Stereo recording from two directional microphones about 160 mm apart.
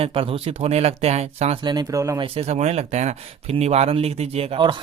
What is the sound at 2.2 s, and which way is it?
Speech, 40° right (ahead or behind).